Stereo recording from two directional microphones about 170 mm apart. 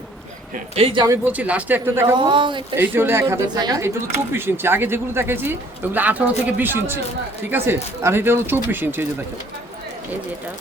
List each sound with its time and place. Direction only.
0.8 s speech: 35° right (ahead or behind)
1.0 s speech: 15° right (ahead or behind)
2.1 s a man's voice: 30° right (ahead or behind)
2.7 s speech: 10° right (ahead or behind)